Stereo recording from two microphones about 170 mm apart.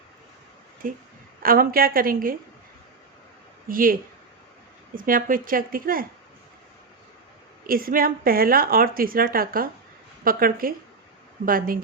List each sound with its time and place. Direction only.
0.8 s a woman's voice: 55° right (ahead or behind)
3.7 s a woman's voice: 55° right (ahead or behind)
4.9 s a woman's voice: 55° right (ahead or behind)
7.7 s a woman's voice: 60° right (ahead or behind)